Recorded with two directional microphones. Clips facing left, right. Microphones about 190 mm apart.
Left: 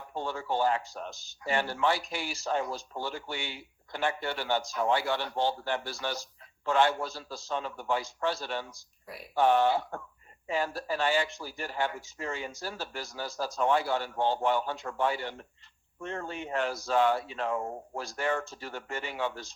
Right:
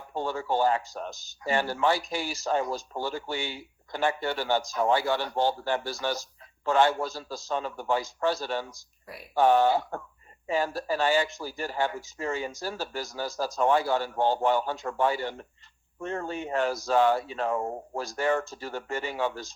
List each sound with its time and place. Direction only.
0.1 s speech: 40° right (ahead or behind)